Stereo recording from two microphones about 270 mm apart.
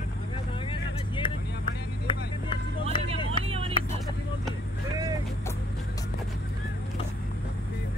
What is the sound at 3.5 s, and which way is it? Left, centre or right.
Vehicle, right.